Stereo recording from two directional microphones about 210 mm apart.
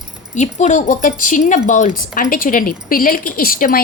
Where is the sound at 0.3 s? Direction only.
35° left (ahead or behind).